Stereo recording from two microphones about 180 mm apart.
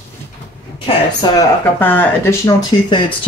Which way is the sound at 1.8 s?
10° left (ahead or behind).